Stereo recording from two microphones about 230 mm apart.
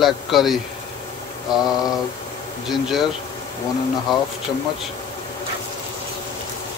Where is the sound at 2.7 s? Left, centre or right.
Centre.